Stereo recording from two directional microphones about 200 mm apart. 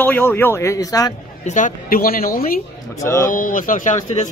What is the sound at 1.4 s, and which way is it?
Speech, 40° left (ahead or behind).